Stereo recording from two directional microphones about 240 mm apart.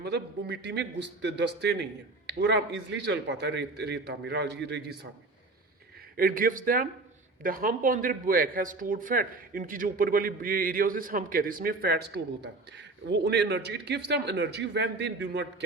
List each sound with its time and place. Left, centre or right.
0.0 s a man's voice: right
6.1 s a man's voice: right